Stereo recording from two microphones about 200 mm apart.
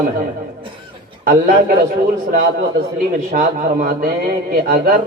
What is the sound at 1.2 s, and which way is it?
A man's voice, 45° right (ahead or behind).